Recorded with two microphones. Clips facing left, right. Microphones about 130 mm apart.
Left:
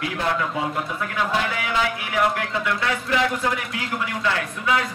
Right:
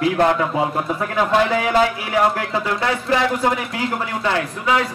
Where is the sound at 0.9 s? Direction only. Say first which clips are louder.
Right 8 dB; 35° right (ahead or behind).